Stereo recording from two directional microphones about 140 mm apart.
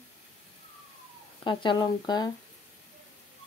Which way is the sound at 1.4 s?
35° left (ahead or behind).